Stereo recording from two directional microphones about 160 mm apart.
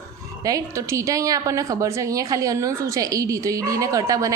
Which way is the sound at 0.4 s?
20° right (ahead or behind).